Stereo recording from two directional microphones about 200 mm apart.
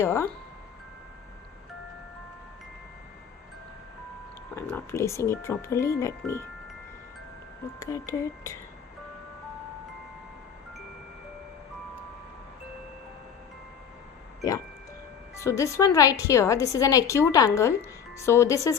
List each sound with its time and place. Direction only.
0.0 s speech: 15° left (ahead or behind)
4.7 s speech: 15° left (ahead or behind)
7.8 s speech: 15° left (ahead or behind)
15.4 s speech: 15° left (ahead or behind)